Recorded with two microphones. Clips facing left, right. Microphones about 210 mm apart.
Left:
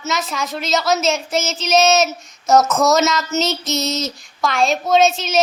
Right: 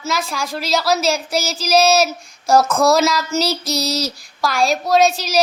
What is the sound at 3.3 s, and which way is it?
Child singing, 35° right (ahead or behind).